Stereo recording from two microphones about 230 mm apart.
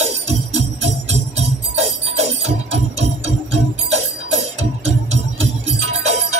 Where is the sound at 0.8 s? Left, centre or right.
Right.